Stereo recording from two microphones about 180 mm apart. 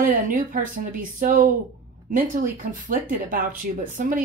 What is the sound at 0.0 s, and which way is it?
Speech, 45° right (ahead or behind).